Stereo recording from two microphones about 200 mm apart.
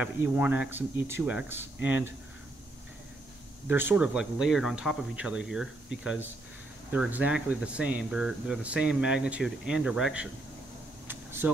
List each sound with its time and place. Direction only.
0.0 s speech: 5° right (ahead or behind)
3.6 s speech: 10° right (ahead or behind)
11.1 s a sound: 10° right (ahead or behind)